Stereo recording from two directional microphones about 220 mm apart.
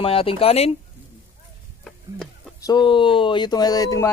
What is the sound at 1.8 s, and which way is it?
Stir, 5° left (ahead or behind).